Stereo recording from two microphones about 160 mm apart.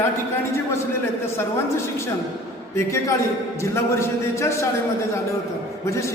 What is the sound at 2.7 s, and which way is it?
A man's voice, 20° left (ahead or behind).